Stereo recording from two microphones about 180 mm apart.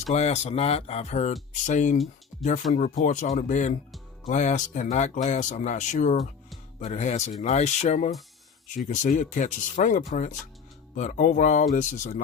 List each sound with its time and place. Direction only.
0.1 s speech: 35° left (ahead or behind)